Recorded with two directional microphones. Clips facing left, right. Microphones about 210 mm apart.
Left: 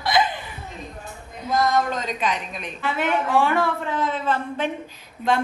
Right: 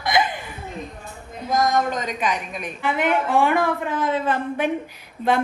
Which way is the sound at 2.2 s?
10° right (ahead or behind).